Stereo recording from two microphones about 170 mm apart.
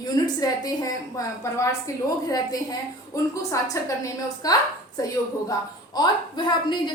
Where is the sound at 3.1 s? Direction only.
20° left (ahead or behind).